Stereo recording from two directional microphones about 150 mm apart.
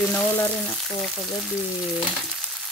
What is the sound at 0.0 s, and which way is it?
Speech, 10° left (ahead or behind).